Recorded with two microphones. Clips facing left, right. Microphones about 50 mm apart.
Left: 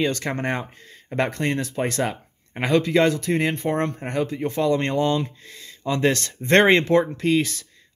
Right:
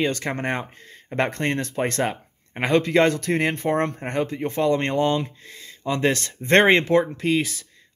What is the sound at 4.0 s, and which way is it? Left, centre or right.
Speech, right.